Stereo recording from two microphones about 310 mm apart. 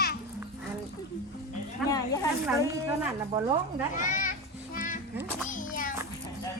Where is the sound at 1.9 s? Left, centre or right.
Centre.